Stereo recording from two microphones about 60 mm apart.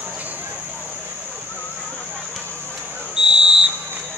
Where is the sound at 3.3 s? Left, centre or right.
Centre.